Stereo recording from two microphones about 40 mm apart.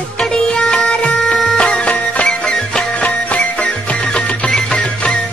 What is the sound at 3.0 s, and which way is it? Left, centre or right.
Music, left.